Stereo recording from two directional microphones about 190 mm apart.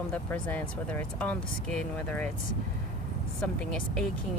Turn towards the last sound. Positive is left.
turn(degrees=5)  # may be behind; listen again after turning